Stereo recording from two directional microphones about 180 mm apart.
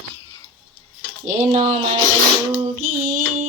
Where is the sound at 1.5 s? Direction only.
35° right (ahead or behind).